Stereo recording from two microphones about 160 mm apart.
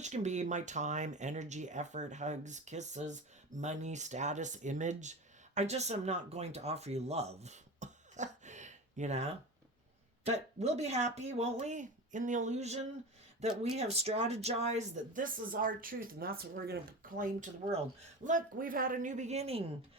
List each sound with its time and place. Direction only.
0.0 s speech: 45° right (ahead or behind); by 17.2 s 70° right (ahead or behind)
18.3 s speech: 60° right (ahead or behind); by 19.6 s 40° right (ahead or behind)